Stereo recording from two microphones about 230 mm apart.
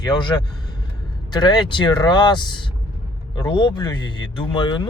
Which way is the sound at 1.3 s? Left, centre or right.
Centre.